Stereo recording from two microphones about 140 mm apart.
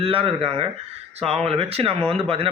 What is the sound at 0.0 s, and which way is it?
Speech, 40° right (ahead or behind).